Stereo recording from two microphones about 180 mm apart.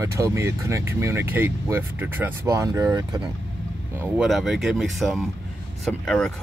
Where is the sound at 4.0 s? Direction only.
5° right (ahead or behind).